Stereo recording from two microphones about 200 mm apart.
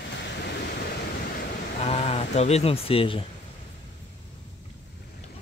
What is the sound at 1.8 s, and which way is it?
Speech, 30° left (ahead or behind).